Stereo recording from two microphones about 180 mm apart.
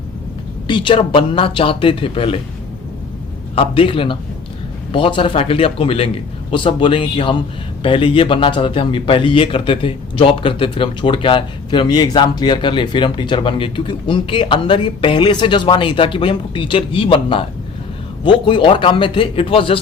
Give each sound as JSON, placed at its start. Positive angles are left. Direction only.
{"t": 0.7, "sound": "a man's voice", "side_deg": 25}
{"t": 3.5, "sound": "a man's voice", "side_deg": 30}